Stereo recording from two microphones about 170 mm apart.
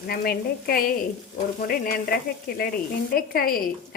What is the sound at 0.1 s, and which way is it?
Speech, 60° left (ahead or behind).